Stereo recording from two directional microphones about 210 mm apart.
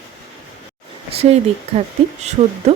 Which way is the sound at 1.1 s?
30° right (ahead or behind).